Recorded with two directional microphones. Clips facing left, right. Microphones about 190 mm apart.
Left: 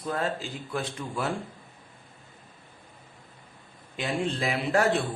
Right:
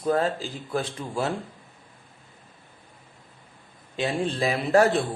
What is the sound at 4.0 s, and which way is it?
Speech, 30° right (ahead or behind).